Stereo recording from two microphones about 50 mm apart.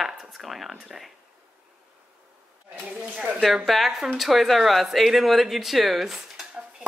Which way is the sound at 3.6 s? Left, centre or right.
Centre.